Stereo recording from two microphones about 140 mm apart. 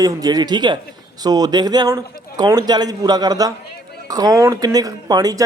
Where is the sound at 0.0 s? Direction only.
25° right (ahead or behind).